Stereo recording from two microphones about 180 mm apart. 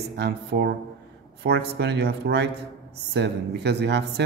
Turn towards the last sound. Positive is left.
turn(degrees=-65)  # may be behind; listen again after turning